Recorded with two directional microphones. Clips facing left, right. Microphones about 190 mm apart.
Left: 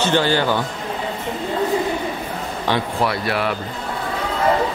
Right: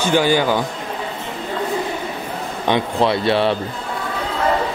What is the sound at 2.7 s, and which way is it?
Speech, 25° right (ahead or behind).